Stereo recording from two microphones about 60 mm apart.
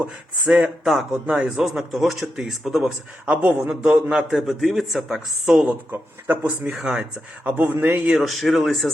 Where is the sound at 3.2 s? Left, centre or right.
Right.